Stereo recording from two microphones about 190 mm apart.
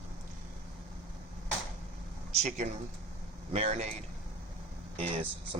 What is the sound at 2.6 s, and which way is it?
Speech, 40° right (ahead or behind).